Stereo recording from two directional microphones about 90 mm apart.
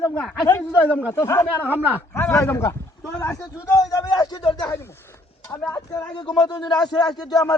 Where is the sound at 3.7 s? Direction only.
40° left (ahead or behind).